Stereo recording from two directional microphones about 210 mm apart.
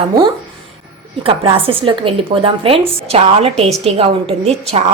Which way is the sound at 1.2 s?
25° right (ahead or behind).